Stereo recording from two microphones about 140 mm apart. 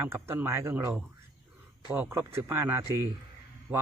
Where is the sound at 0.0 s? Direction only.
15° right (ahead or behind).